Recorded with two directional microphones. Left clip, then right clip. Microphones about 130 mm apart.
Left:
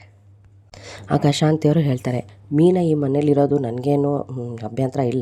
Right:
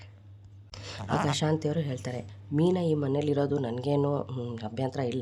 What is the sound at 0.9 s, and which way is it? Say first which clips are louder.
Speech: left 9 dB; 65° left (ahead or behind).